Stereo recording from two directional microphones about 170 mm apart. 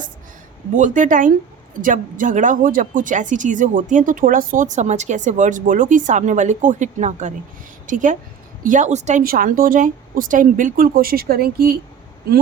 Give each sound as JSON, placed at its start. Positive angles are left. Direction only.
{"t": 0.8, "sound": "speech", "side_deg": -50}
{"t": 9.2, "sound": "speech", "side_deg": -55}